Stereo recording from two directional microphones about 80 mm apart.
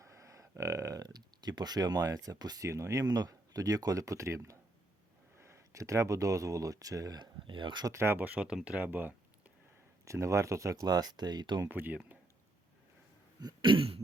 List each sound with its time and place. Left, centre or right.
0.0 s a sound: right
1.0 s speech: right
7.2 s speech: right
7.9 s speech: right
8.2 s speech: centre
10.1 s speech: right
11.7 s speech: right
13.4 s speech: right